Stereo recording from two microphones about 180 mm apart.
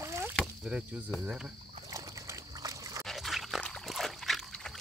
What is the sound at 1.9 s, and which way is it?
Dog, 20° right (ahead or behind).